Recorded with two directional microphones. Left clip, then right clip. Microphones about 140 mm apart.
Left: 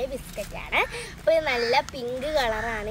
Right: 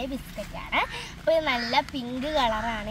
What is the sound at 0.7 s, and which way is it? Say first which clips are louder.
Speech: left 2 dB; 25° left (ahead or behind).